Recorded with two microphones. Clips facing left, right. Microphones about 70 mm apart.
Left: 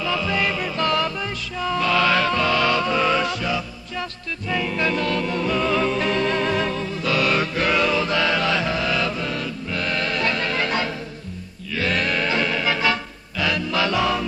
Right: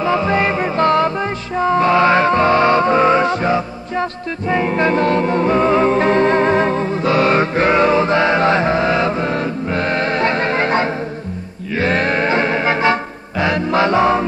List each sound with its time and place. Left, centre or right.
0.0 s music: right